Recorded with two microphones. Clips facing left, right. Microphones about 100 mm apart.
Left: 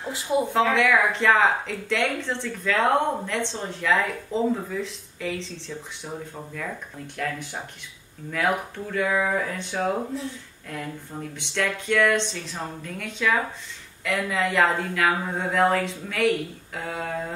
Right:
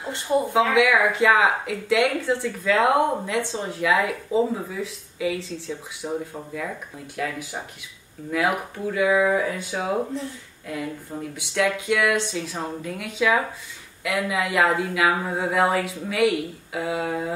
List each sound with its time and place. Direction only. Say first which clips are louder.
0.0 s speech: right 1 dB; centre (ahead or behind)
7.2 s speech: right 1 dB; 5° right (ahead or behind)
11.3 s speech: right 4 dB; 5° right (ahead or behind)